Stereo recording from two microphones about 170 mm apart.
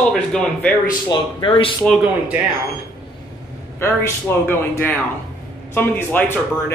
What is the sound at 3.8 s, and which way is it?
A man's voice, 15° left (ahead or behind).